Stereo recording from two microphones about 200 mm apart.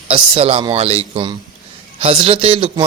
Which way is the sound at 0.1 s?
30° right (ahead or behind).